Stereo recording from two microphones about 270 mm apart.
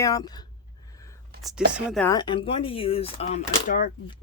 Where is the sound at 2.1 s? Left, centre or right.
Centre.